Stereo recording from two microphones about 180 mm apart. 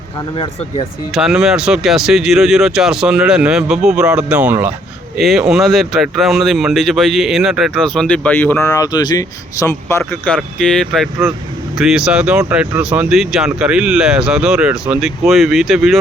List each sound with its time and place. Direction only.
0.3 s speech: 25° left (ahead or behind)
1.1 s speech: 5° right (ahead or behind); by 10.0 s 15° left (ahead or behind)
10.0 s speech: 5° left (ahead or behind)